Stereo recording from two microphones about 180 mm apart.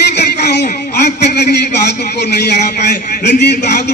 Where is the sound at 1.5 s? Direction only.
65° left (ahead or behind).